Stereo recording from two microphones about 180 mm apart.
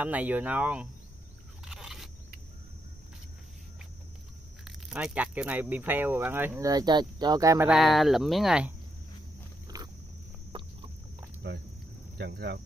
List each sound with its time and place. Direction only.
0.0 s speech: 10° right (ahead or behind)
1.6 s a sound: centre (ahead or behind)
4.6 s speech: 5° right (ahead or behind)
6.7 s speech: 25° right (ahead or behind)
7.7 s speech: centre (ahead or behind)
10.5 s chicken: 30° right (ahead or behind)
11.4 s speech: 70° right (ahead or behind)